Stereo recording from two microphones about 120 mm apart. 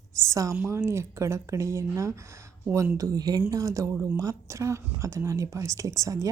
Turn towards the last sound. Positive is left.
turn(degrees=-25)  # may be behind; listen again after turning